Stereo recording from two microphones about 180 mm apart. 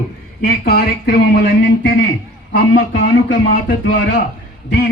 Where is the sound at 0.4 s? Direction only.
60° left (ahead or behind).